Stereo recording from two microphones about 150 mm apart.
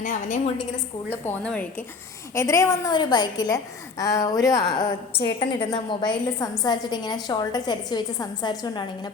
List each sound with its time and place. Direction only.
0.0 s a woman's voice: 60° left (ahead or behind)
1.2 s a woman's voice: 10° left (ahead or behind); by 8.9 s 30° left (ahead or behind)